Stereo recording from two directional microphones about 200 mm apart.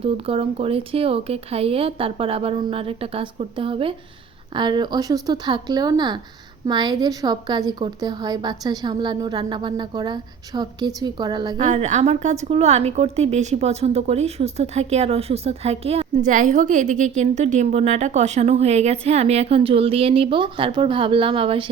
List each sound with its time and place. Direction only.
0.0 s a woman's voice: 30° right (ahead or behind)
11.6 s a woman's voice: 35° right (ahead or behind)